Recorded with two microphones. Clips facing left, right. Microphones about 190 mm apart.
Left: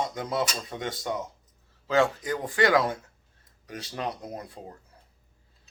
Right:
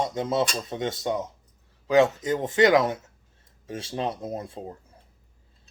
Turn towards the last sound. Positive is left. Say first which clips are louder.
# right 5 dB
turn(degrees=-25)  # may be behind; listen again after turning